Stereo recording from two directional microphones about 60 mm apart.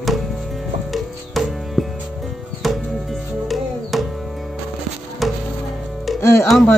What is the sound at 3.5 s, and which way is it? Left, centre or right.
Music, centre.